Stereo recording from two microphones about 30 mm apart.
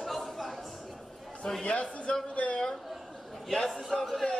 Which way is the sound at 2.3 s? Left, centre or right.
Left.